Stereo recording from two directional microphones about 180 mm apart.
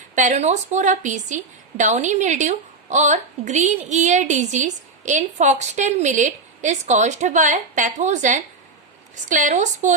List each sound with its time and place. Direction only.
0.2 s a woman's voice: 40° right (ahead or behind)